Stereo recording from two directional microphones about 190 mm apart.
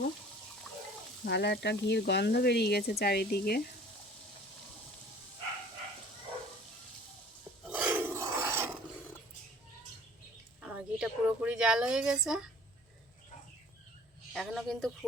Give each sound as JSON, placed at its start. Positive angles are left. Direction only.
{"t": 1.2, "sound": "speech", "side_deg": 60}
{"t": 7.6, "sound": "filing", "side_deg": -5}
{"t": 10.6, "sound": "a sound", "side_deg": -5}
{"t": 14.3, "sound": "a woman's voice", "side_deg": 0}